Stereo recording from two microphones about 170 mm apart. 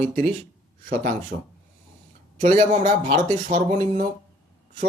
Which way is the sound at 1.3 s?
75° right (ahead or behind).